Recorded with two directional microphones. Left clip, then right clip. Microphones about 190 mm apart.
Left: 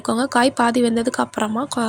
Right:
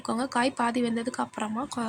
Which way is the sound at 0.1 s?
30° left (ahead or behind).